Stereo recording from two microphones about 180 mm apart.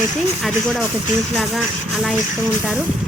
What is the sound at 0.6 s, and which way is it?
Speech, 5° left (ahead or behind).